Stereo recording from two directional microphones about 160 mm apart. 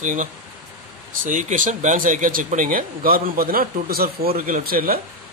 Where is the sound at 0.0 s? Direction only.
50° right (ahead or behind).